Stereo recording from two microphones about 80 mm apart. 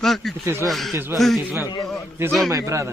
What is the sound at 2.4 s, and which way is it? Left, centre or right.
Speech, right.